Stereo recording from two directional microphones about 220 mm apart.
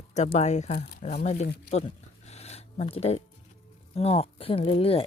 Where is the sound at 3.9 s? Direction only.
25° left (ahead or behind).